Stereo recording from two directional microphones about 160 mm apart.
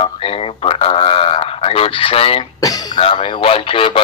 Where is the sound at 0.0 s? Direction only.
35° left (ahead or behind).